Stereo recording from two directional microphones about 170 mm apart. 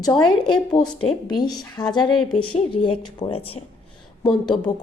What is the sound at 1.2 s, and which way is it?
Speech, 25° left (ahead or behind).